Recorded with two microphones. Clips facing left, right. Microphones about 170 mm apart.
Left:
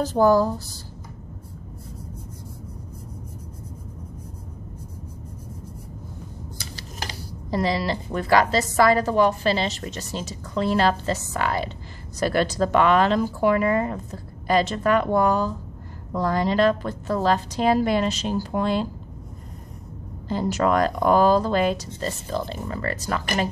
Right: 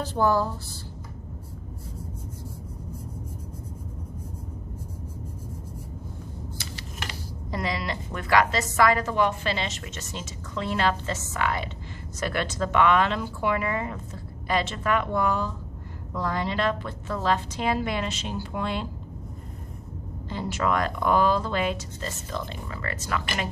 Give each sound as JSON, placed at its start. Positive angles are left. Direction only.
{"t": 0.0, "sound": "speech", "side_deg": 40}
{"t": 6.6, "sound": "speech", "side_deg": 35}
{"t": 20.2, "sound": "speech", "side_deg": 40}